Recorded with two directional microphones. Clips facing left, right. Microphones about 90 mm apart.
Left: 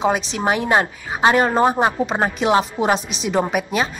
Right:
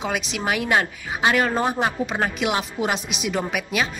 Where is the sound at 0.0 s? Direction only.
35° left (ahead or behind).